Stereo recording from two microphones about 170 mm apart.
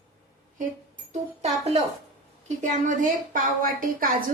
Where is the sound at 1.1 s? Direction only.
40° right (ahead or behind).